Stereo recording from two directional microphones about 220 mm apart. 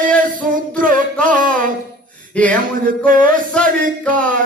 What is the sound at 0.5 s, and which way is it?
Mantra, 40° right (ahead or behind).